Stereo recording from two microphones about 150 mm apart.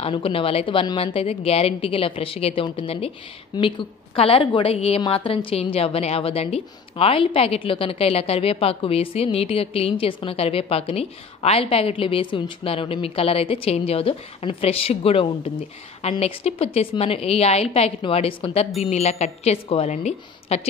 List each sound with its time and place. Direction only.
0.0 s a woman's voice: 40° left (ahead or behind)